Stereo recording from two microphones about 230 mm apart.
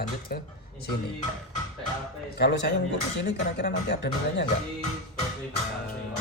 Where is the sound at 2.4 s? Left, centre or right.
Left.